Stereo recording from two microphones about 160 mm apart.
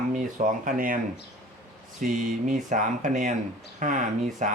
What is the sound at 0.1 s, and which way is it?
Speech, 55° right (ahead or behind).